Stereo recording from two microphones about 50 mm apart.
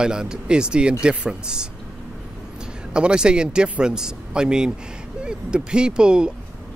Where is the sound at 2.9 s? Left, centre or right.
Centre.